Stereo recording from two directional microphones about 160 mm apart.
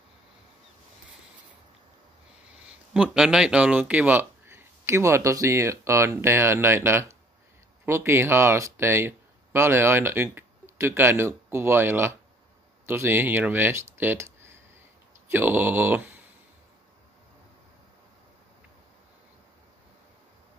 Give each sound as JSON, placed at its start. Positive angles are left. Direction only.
{"t": 2.9, "sound": "speech", "side_deg": -5}
{"t": 15.3, "sound": "speech", "side_deg": -10}